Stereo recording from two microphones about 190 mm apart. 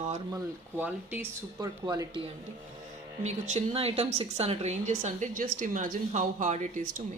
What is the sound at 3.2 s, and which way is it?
A woman's voice, 35° right (ahead or behind).